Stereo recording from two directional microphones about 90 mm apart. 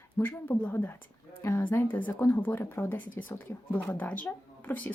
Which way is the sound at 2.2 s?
30° left (ahead or behind).